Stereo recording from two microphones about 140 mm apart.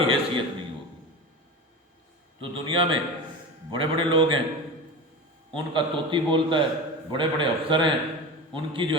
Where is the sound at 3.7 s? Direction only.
35° right (ahead or behind).